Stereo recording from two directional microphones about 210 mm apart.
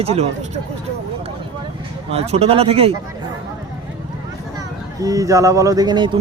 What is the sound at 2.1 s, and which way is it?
Speech, 30° right (ahead or behind).